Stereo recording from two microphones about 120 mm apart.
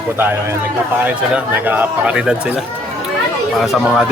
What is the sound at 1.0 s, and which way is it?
Speech, 15° right (ahead or behind).